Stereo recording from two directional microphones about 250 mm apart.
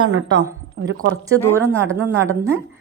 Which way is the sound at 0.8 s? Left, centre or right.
Right.